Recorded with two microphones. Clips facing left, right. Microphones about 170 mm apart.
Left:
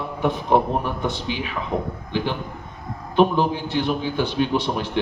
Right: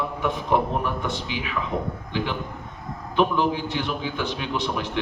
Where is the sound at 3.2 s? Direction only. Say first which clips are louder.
Left 3 dB; 35° left (ahead or behind).